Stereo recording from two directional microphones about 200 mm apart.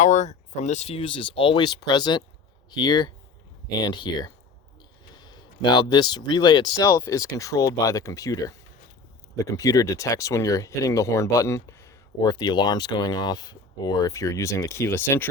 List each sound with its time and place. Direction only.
0.0 s speech: 35° left (ahead or behind); by 15.3 s 10° left (ahead or behind)